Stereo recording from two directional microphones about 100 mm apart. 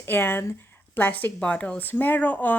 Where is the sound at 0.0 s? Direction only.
20° left (ahead or behind).